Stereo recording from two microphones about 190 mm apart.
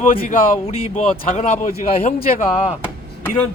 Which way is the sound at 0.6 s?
35° left (ahead or behind).